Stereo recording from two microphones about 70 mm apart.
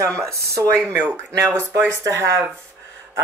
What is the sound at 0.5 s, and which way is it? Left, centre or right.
Speech, right.